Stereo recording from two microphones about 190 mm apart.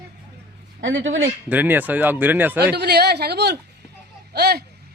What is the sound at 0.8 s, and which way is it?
Speech, 90° right.